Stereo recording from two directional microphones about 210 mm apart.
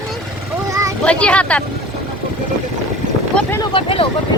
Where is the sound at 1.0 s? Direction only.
5° left (ahead or behind).